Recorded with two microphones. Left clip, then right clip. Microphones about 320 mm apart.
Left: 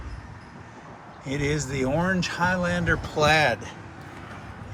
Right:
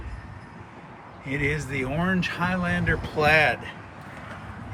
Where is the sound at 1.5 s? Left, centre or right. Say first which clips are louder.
Left 3 dB; centre.